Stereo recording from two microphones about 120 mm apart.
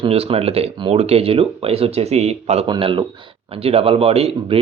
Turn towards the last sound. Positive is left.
turn(degrees=-55)  # may be behind; listen again after turning